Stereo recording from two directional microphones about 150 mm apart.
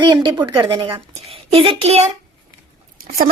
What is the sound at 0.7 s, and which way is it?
Speech, 20° right (ahead or behind).